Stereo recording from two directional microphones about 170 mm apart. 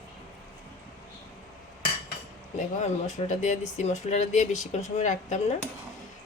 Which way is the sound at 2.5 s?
45° left (ahead or behind).